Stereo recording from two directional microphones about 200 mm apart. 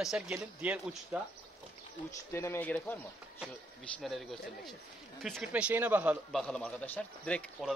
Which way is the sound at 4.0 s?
Centre (ahead or behind).